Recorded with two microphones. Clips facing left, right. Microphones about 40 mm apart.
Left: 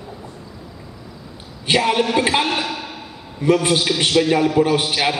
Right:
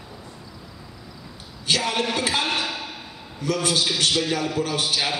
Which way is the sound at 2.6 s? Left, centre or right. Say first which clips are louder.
Left 3 dB; centre.